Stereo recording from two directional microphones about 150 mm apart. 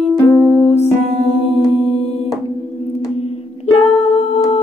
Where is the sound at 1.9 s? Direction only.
45° left (ahead or behind).